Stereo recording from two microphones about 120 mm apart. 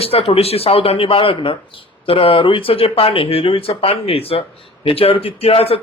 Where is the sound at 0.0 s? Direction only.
55° left (ahead or behind).